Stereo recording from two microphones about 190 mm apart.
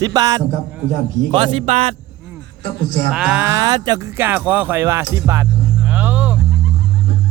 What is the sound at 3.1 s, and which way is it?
Speech, 5° right (ahead or behind).